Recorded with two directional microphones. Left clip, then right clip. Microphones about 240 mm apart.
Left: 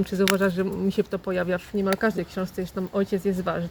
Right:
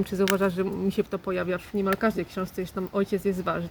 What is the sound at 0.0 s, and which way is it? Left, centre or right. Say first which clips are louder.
Speech: left 2 dB; centre.